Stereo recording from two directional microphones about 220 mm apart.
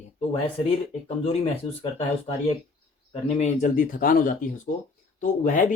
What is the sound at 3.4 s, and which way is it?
Speech, 30° left (ahead or behind).